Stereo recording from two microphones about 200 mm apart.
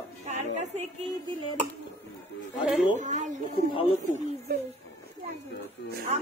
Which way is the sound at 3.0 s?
40° right (ahead or behind).